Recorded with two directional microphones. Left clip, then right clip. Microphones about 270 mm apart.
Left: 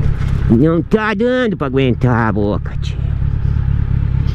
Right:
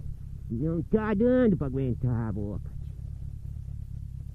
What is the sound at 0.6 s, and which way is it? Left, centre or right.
Speech, centre.